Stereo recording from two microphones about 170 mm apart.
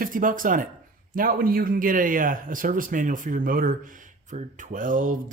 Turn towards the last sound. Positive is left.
turn(degrees=-50)  # may be behind; listen again after turning